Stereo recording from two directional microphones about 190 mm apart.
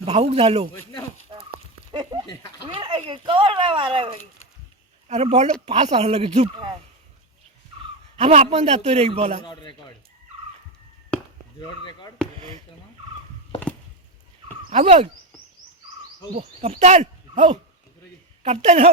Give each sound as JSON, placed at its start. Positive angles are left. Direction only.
{"t": 0.0, "sound": "a man's voice", "side_deg": -35}
{"t": 1.9, "sound": "a sound", "side_deg": -25}
{"t": 2.6, "sound": "a child's voice", "side_deg": -25}
{"t": 8.1, "sound": "a man's voice", "side_deg": -35}
{"t": 9.4, "sound": "a man's voice", "side_deg": 25}
{"t": 11.1, "sound": "chop", "side_deg": 5}
{"t": 11.9, "sound": "a man's voice", "side_deg": 25}
{"t": 12.4, "sound": "speech", "side_deg": -35}
{"t": 14.7, "sound": "a man's voice", "side_deg": -35}
{"t": 16.4, "sound": "a man's voice", "side_deg": -35}